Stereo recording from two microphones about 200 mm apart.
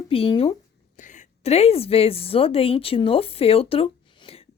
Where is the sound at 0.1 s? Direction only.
30° left (ahead or behind).